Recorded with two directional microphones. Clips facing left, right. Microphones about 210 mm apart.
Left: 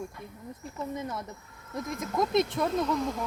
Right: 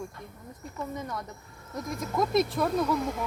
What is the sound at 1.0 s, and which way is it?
Speech, 5° left (ahead or behind).